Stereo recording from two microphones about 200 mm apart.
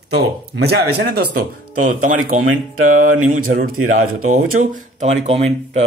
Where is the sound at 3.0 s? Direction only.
90° right.